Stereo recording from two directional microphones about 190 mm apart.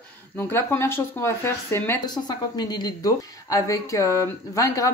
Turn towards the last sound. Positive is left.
turn(degrees=20)  # may be behind; listen again after turning